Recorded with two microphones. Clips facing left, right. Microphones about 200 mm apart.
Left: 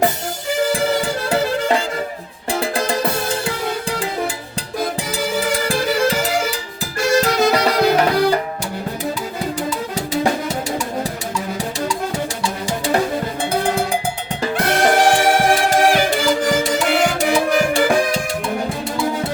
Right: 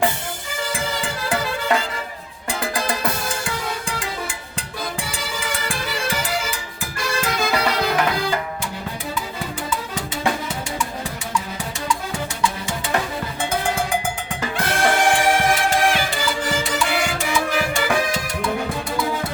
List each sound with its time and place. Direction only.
0.7 s music: 35° left (ahead or behind)
5.6 s music: 40° left (ahead or behind)
9.6 s music: 40° left (ahead or behind)
13.5 s cowbell: 35° left (ahead or behind)
14.4 s music: 35° left (ahead or behind)